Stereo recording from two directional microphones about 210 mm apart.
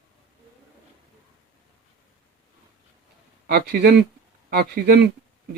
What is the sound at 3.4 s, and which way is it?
Speech, 50° right (ahead or behind).